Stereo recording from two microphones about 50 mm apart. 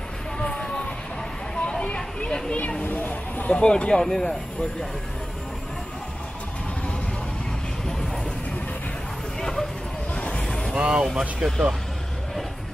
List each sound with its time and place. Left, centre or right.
0.4 s a sound: centre
1.5 s vehicle: centre
2.8 s a sound: left
3.5 s speech: centre
9.4 s dog: centre
10.1 s vehicle: left
10.8 s speech: centre
11.1 s speech: centre